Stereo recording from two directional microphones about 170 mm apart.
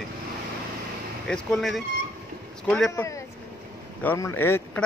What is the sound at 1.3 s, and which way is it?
Speech, centre (ahead or behind).